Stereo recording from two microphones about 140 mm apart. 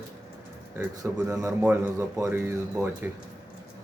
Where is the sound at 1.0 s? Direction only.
10° right (ahead or behind).